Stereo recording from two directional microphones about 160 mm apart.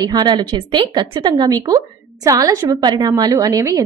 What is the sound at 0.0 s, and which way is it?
A woman's voice, 25° right (ahead or behind).